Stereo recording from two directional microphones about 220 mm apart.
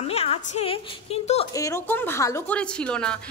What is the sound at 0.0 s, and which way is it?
A woman's voice, 25° left (ahead or behind).